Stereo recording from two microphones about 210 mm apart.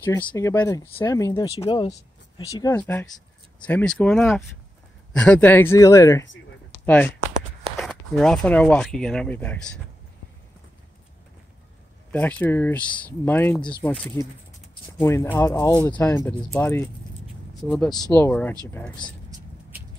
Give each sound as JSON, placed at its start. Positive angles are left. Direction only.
{"t": 0.0, "sound": "speech", "side_deg": 20}
{"t": 7.8, "sound": "speech", "side_deg": 0}
{"t": 12.1, "sound": "speech", "side_deg": 10}